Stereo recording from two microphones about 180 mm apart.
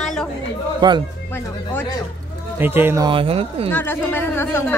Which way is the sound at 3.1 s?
30° right (ahead or behind).